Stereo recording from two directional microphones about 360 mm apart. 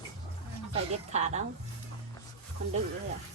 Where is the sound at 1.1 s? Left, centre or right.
Centre.